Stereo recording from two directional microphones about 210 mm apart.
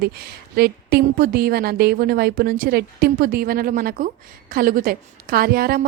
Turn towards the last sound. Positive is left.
turn(degrees=-45)  # may be behind; listen again after turning